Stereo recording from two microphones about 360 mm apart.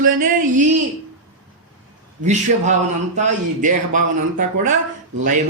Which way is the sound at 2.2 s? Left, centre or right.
Centre.